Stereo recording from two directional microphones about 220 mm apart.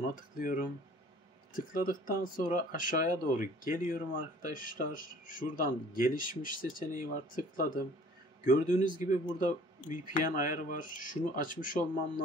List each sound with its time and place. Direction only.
0.1 s speech: 40° left (ahead or behind)